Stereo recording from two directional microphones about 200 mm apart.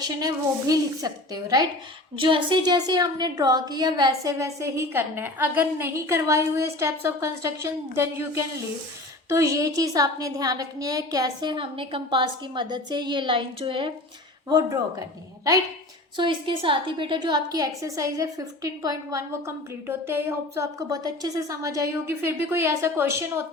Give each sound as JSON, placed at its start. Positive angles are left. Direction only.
{"t": 0.0, "sound": "a woman's voice", "side_deg": -20}
{"t": 16.1, "sound": "a woman's voice", "side_deg": -25}